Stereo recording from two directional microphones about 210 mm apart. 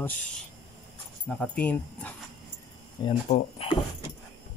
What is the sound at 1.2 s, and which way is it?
Speech, 5° left (ahead or behind).